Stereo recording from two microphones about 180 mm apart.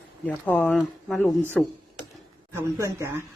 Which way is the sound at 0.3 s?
10° left (ahead or behind).